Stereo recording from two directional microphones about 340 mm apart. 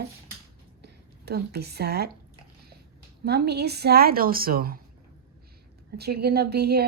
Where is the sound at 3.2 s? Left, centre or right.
Right.